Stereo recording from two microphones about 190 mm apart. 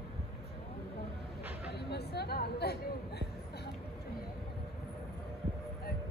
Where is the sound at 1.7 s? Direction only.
60° left (ahead or behind).